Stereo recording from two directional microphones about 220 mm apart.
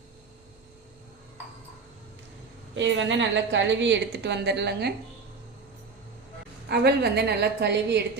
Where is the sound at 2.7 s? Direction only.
55° right (ahead or behind).